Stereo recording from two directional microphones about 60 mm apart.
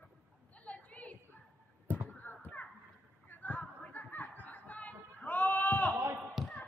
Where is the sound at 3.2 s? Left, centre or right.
Left.